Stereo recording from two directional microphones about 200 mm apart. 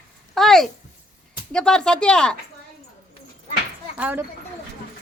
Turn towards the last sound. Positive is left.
turn(degrees=-5)  # may be behind; listen again after turning